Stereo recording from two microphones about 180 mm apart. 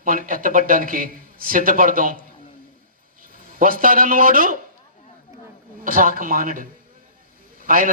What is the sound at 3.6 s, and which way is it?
Speech, 50° right (ahead or behind).